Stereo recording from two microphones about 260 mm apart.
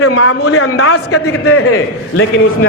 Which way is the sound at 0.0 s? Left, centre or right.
Left.